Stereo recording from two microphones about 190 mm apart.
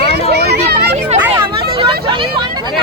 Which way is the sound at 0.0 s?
30° left (ahead or behind).